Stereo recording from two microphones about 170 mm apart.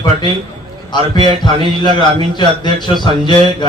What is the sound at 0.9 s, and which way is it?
Speech, 25° left (ahead or behind).